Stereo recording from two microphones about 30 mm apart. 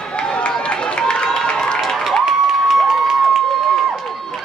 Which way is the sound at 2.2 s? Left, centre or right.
Centre.